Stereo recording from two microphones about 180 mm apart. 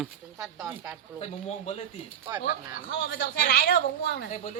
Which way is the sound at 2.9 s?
60° left (ahead or behind).